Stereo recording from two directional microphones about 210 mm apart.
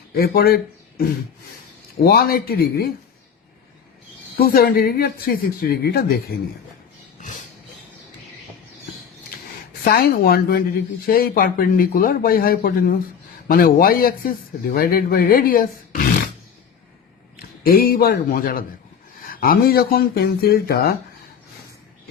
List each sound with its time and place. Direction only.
0.1 s speech: 50° left (ahead or behind)
4.4 s speech: 45° left (ahead or behind)
9.8 s speech: 45° left (ahead or behind)
17.3 s a man's voice: 45° left (ahead or behind)